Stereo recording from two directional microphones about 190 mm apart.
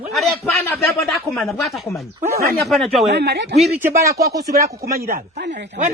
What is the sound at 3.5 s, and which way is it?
Speech, centre (ahead or behind).